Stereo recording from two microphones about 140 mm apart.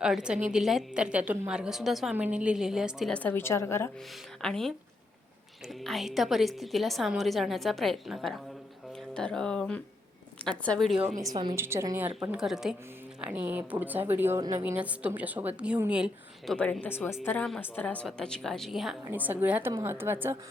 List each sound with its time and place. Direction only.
0.0 s a woman's voice: 5° right (ahead or behind)
3.1 s a woman's voice: 10° left (ahead or behind)
4.4 s a woman's voice: 5° left (ahead or behind)
11.2 s a woman's voice: 30° right (ahead or behind)
11.5 s a woman's voice: 20° right (ahead or behind)
13.2 s a woman's voice: 15° right (ahead or behind)
16.6 s a woman's voice: 10° left (ahead or behind)
19.0 s a woman's voice: 15° right (ahead or behind)